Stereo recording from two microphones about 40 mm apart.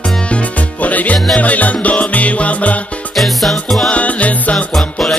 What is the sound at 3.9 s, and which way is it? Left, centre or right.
Music, left.